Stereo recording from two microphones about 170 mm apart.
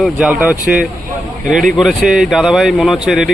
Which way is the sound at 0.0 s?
5° right (ahead or behind).